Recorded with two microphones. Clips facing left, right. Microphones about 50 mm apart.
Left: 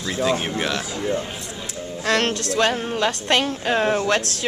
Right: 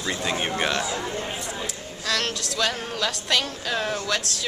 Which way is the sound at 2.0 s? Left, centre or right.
Left.